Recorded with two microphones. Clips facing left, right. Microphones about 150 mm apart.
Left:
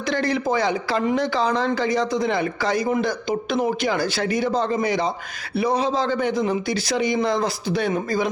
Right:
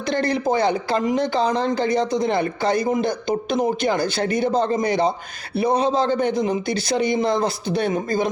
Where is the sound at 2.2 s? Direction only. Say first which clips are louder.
Right 2 dB; 50° right (ahead or behind).